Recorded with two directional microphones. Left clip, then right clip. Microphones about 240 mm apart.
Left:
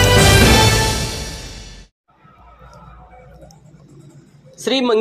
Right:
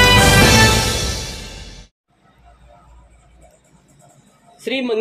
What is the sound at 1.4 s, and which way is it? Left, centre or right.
Music, centre.